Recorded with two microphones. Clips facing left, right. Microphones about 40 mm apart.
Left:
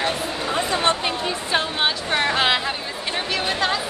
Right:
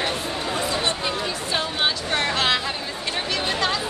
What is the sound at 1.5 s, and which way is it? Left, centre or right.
Speech, centre.